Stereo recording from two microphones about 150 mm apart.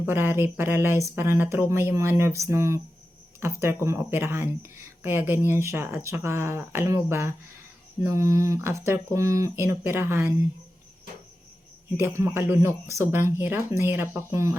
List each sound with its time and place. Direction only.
0.0 s speech: 15° right (ahead or behind)
11.9 s speech: 15° right (ahead or behind)